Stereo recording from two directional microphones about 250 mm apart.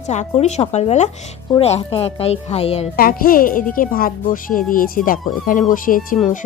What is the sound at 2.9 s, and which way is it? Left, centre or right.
Speech, left.